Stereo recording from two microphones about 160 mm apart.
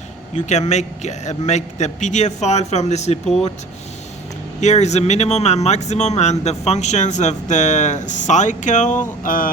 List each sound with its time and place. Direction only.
0.3 s speech: 45° left (ahead or behind)
4.6 s speech: 45° left (ahead or behind)